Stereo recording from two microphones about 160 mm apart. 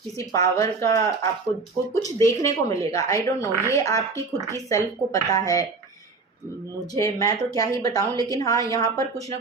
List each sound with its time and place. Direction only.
0.2 s a woman's voice: 20° left (ahead or behind)
6.9 s a woman's voice: 20° left (ahead or behind)